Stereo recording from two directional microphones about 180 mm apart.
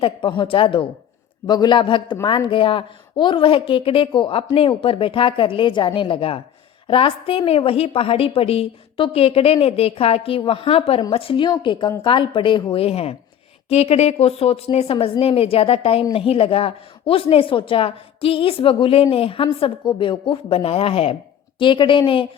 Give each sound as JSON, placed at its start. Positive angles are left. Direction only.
{"t": 0.0, "sound": "a woman's voice", "side_deg": 30}